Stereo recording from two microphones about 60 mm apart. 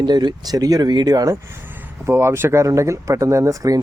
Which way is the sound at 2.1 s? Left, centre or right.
Right.